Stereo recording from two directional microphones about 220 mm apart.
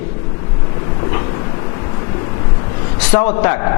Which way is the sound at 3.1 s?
20° left (ahead or behind).